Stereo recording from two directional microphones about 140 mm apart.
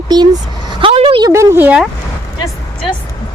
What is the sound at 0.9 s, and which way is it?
Speech, 45° right (ahead or behind).